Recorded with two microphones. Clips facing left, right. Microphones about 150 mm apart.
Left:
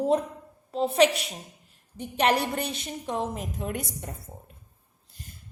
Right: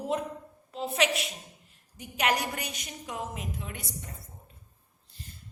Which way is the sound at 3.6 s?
55° left (ahead or behind).